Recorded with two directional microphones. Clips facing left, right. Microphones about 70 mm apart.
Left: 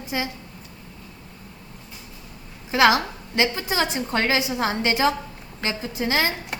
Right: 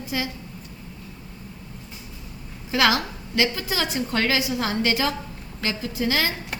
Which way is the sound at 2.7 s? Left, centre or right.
Left.